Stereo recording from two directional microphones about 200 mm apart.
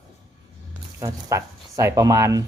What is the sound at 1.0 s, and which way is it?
Speech, 15° right (ahead or behind).